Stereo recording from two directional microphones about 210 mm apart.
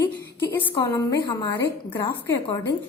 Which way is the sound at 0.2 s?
10° left (ahead or behind).